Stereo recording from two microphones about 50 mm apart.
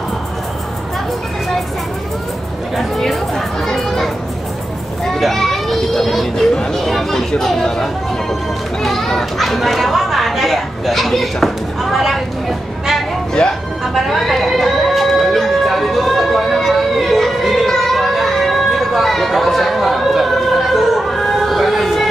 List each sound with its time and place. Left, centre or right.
2.8 s a child's voice: centre
13.4 s speech: centre
13.9 s a sound: centre